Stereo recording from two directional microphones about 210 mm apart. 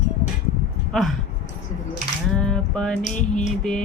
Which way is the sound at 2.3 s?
5° left (ahead or behind).